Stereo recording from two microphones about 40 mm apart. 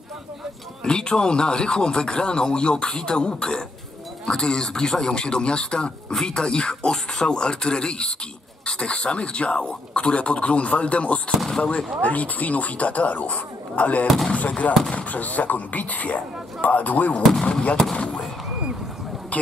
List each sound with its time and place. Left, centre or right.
0.8 s speech: centre
11.5 s speech: left
12.0 s speech: left
14.0 s speech: centre
14.6 s speech: left
17.3 s speech: left